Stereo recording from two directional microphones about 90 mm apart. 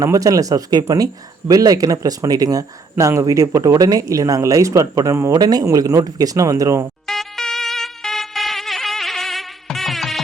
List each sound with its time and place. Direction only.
0.0 s speech: 40° right (ahead or behind)
5.3 s speech: 45° right (ahead or behind)
7.1 s music: 5° left (ahead or behind)